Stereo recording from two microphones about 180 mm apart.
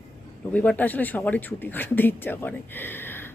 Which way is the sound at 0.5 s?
10° left (ahead or behind).